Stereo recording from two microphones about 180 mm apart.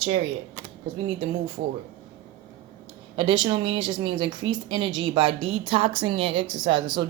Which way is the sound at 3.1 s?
30° right (ahead or behind).